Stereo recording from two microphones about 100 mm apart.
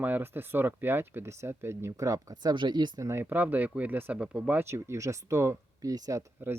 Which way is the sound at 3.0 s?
25° right (ahead or behind).